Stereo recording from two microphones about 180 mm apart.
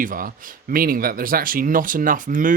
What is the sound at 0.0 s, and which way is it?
Speech, 50° right (ahead or behind).